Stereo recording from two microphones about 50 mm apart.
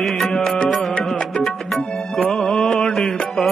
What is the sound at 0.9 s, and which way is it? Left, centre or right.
Music, centre.